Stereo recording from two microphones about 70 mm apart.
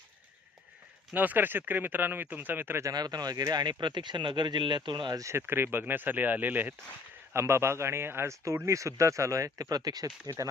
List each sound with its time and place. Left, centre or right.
1.1 s speech: right
2.8 s speech: right
5.4 s speech: right
7.3 s speech: right
10.2 s speech: right